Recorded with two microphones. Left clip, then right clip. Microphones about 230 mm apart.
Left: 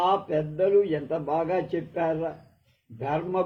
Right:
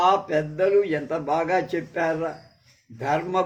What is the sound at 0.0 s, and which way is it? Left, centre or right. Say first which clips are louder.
Speech: right 4 dB; right.